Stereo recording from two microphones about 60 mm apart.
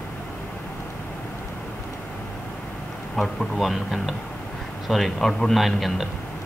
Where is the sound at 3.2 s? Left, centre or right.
Centre.